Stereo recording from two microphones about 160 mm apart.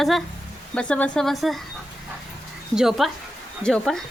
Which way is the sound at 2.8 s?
Centre (ahead or behind).